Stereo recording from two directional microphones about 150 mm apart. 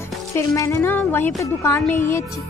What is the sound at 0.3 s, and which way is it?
Speech, 20° left (ahead or behind).